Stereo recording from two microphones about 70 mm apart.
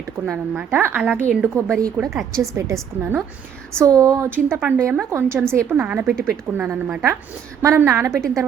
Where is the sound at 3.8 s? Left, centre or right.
Right.